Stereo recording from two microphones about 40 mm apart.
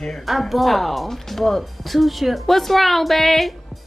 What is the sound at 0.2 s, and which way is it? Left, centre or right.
Speech, centre.